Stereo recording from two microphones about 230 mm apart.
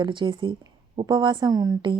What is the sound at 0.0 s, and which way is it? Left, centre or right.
Speech, right.